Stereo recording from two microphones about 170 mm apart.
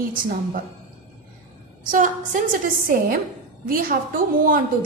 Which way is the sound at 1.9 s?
50° right (ahead or behind).